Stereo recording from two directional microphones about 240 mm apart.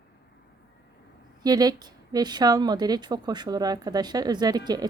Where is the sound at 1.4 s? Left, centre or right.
Centre.